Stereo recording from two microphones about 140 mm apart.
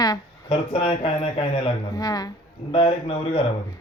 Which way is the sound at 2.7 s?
40° left (ahead or behind).